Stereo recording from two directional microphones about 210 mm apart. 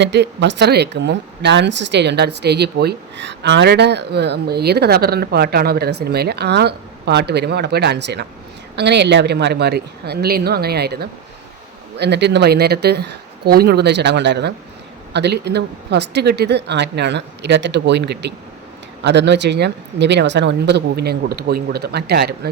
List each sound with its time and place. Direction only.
0.0 s speech: 55° right (ahead or behind)